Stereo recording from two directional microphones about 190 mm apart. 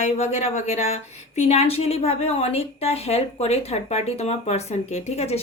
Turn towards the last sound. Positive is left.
turn(degrees=35)  # may be behind; listen again after turning